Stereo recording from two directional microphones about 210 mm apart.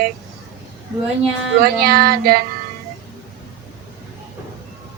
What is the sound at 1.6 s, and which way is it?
Speech, 45° right (ahead or behind).